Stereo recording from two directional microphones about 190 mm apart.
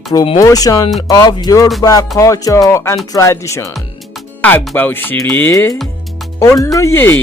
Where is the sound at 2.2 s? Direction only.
15° left (ahead or behind).